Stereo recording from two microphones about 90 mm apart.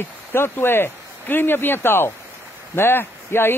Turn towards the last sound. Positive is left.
turn(degrees=25)  # may be behind; listen again after turning